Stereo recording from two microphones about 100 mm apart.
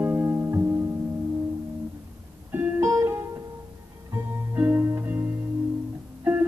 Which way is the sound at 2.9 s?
30° right (ahead or behind).